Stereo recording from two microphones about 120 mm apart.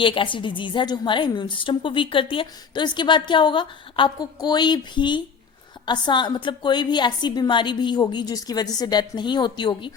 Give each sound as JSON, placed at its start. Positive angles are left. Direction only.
{"t": 0.0, "sound": "a woman's voice", "side_deg": 45}